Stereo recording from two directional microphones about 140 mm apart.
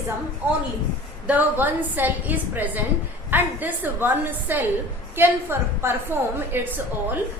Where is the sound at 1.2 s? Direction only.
10° right (ahead or behind).